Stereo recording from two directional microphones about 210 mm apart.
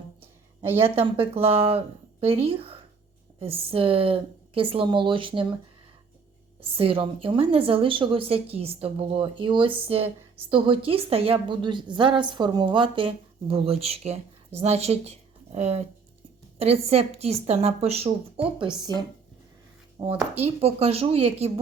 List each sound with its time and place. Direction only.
0.9 s a woman's voice: 25° right (ahead or behind)
6.6 s a woman's voice: 25° right (ahead or behind)
20.0 s a woman's voice: 20° right (ahead or behind)
20.4 s a woman's voice: 30° right (ahead or behind)